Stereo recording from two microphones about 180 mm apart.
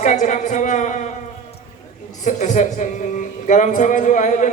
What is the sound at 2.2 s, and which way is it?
A man's voice, 40° left (ahead or behind).